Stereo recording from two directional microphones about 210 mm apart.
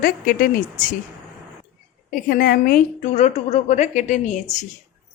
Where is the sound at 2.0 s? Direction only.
45° left (ahead or behind).